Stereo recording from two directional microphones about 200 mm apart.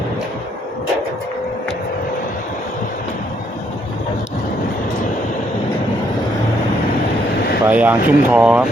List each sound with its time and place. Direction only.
7.7 s speech: 10° right (ahead or behind)